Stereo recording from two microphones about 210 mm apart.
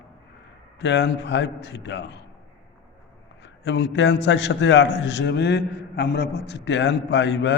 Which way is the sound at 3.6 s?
55° left (ahead or behind).